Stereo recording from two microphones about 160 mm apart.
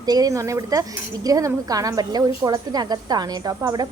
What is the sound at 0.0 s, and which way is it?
Speech, 25° right (ahead or behind).